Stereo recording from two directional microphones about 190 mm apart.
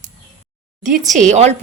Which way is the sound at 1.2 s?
35° right (ahead or behind).